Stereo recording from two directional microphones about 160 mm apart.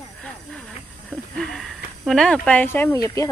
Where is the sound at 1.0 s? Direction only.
5° left (ahead or behind).